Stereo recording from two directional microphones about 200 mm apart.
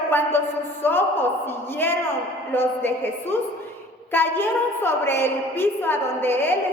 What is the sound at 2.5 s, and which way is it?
A woman's voice, 10° left (ahead or behind).